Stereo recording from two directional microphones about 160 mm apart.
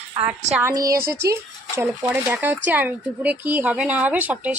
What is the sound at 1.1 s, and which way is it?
Speech, 15° right (ahead or behind).